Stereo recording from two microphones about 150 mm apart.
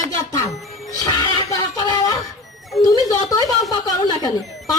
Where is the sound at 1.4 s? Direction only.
25° left (ahead or behind).